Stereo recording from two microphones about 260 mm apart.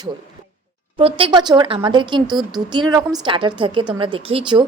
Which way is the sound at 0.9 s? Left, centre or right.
Right.